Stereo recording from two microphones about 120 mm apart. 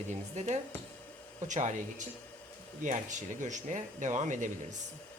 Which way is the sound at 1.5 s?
90° right.